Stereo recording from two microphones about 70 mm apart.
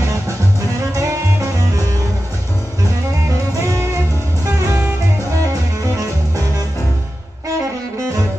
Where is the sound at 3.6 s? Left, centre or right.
Right.